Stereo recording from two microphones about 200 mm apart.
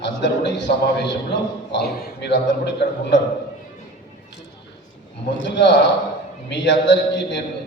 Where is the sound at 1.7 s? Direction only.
60° left (ahead or behind).